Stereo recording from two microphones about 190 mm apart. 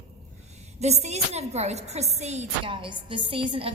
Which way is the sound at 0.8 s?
35° right (ahead or behind).